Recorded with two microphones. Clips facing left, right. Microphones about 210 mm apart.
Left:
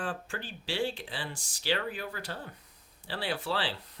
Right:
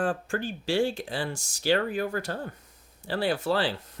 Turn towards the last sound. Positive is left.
turn(degrees=-45)  # may be behind; listen again after turning